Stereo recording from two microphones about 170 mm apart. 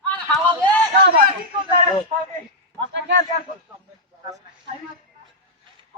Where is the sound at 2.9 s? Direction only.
90° right.